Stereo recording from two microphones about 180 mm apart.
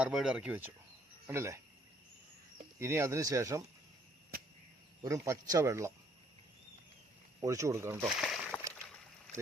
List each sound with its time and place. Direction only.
0.0 s speech: 5° right (ahead or behind)
2.7 s speech: 15° right (ahead or behind)
5.0 s speech: 15° right (ahead or behind)
7.4 s speech: 20° right (ahead or behind)
8.1 s a sound: centre (ahead or behind)